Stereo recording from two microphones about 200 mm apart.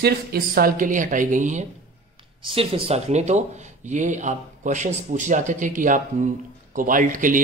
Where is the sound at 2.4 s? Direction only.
25° right (ahead or behind).